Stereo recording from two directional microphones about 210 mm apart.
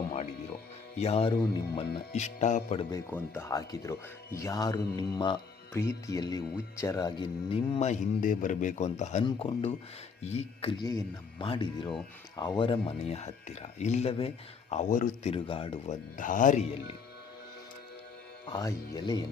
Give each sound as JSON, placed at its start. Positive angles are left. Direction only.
{"t": 0.9, "sound": "speech", "side_deg": 30}
{"t": 2.1, "sound": "speech", "side_deg": 35}
{"t": 2.9, "sound": "speech", "side_deg": 10}
{"t": 16.1, "sound": "speech", "side_deg": 40}
{"t": 18.4, "sound": "speech", "side_deg": 20}